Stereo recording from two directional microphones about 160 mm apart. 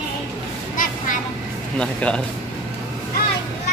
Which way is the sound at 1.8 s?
5° left (ahead or behind).